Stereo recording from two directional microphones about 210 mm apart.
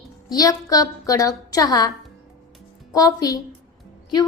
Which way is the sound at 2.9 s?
15° left (ahead or behind).